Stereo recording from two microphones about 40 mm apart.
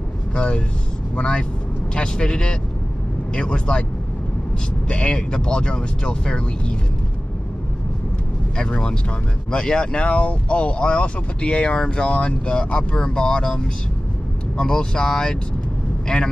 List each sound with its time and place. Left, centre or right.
0.3 s speech: left
4.8 s speech: left
8.6 s speech: left
14.6 s speech: centre